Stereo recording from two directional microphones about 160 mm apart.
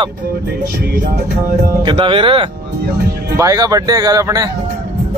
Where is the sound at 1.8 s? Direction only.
30° right (ahead or behind).